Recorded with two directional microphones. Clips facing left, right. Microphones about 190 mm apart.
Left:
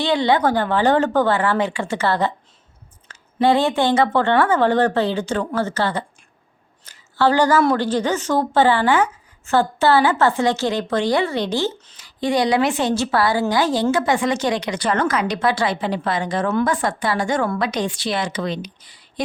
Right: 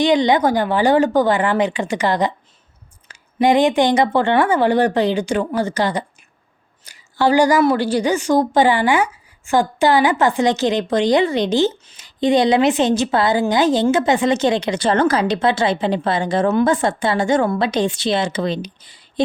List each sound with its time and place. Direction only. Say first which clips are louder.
0.0 s a woman's voice: right 3 dB; 15° right (ahead or behind)